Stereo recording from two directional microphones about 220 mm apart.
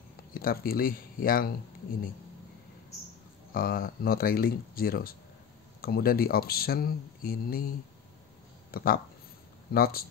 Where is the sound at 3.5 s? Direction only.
40° left (ahead or behind).